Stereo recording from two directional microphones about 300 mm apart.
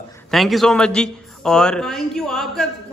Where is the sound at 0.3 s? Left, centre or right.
Centre.